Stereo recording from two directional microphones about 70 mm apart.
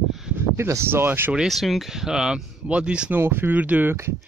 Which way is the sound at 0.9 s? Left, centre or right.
Right.